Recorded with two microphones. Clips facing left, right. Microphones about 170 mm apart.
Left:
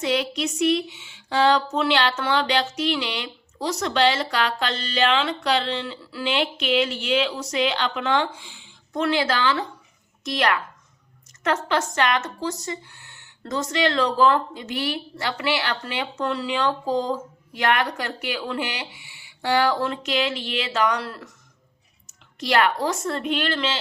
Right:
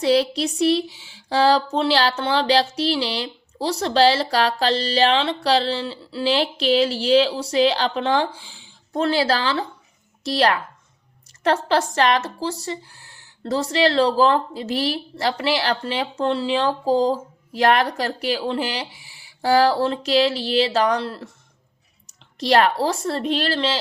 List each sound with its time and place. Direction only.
0.0 s speech: 35° right (ahead or behind)
22.4 s speech: 35° right (ahead or behind)